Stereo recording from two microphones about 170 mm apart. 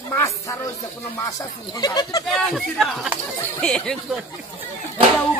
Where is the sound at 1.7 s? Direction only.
20° left (ahead or behind).